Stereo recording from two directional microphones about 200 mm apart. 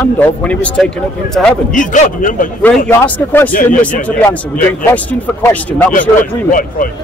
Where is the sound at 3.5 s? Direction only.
45° left (ahead or behind).